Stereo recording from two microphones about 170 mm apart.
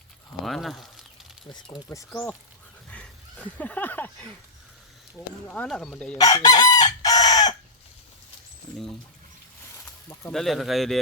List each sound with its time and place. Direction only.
0.4 s speech: centre (ahead or behind)
1.5 s speech: 25° left (ahead or behind)
2.9 s a sound: 10° left (ahead or behind)
5.1 s speech: 5° left (ahead or behind)
6.1 s chicken: 20° left (ahead or behind)
9.8 s a sound: 15° left (ahead or behind)
10.3 s speech: centre (ahead or behind)